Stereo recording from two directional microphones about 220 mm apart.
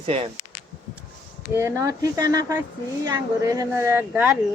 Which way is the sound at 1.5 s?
15° right (ahead or behind).